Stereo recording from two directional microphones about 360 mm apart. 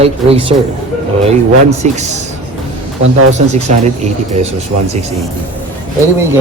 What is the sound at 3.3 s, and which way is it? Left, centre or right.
Speech, centre.